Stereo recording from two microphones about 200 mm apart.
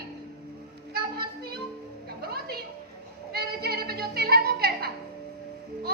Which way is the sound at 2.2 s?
50° right (ahead or behind).